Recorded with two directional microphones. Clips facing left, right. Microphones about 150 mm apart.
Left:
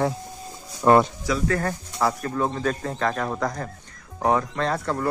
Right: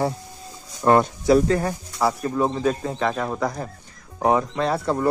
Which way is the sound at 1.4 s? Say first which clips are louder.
Right 3 dB; 15° right (ahead or behind).